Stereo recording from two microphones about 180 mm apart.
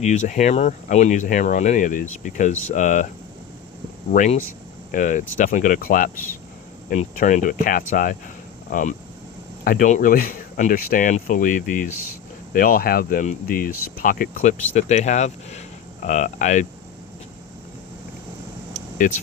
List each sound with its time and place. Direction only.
0.0 s speech: 40° left (ahead or behind)
4.1 s speech: 45° left (ahead or behind)